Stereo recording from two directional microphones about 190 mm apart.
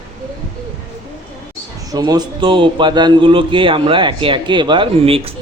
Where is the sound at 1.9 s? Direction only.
20° right (ahead or behind).